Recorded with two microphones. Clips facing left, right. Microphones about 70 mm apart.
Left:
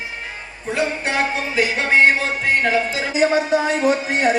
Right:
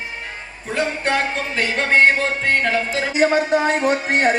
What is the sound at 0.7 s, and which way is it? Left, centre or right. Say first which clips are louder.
Music: right 1 dB; centre.